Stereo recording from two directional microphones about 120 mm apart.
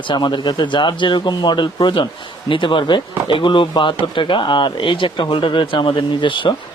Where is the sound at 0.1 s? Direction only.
40° left (ahead or behind).